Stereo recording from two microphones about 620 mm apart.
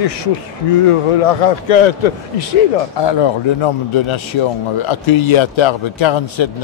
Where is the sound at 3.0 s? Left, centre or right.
Left.